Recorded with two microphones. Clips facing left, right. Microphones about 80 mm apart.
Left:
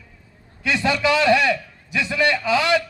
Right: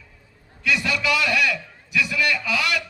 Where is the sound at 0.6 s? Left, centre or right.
Left.